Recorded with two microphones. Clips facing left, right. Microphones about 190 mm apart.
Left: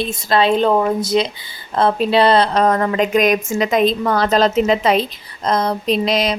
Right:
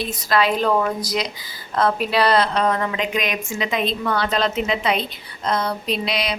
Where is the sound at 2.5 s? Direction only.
45° left (ahead or behind).